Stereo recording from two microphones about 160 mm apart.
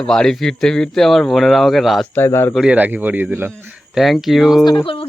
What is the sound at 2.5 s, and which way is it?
Speech, 5° right (ahead or behind).